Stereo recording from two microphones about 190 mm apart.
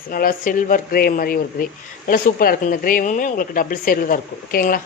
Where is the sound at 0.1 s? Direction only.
50° left (ahead or behind).